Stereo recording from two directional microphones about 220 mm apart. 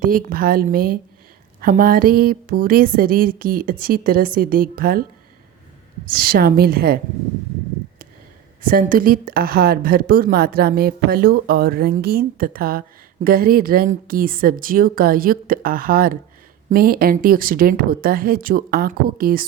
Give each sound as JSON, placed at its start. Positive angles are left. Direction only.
{"t": 0.0, "sound": "speech", "side_deg": -40}
{"t": 6.1, "sound": "a woman's voice", "side_deg": -40}
{"t": 8.6, "sound": "a woman's voice", "side_deg": -40}